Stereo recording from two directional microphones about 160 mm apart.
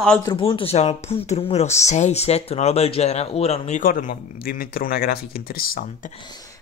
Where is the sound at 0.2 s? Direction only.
30° left (ahead or behind).